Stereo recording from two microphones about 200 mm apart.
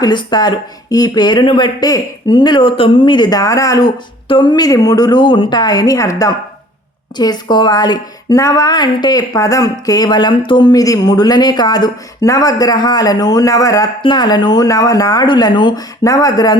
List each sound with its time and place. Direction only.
0.0 s speech: 20° left (ahead or behind)